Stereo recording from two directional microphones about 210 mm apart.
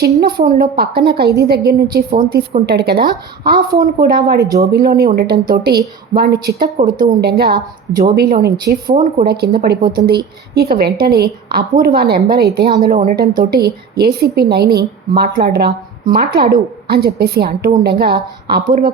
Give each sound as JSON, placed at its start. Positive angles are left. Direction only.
{"t": 0.0, "sound": "a woman's voice", "side_deg": -50}
{"t": 4.4, "sound": "speech", "side_deg": -15}
{"t": 4.7, "sound": "a woman's voice", "side_deg": -50}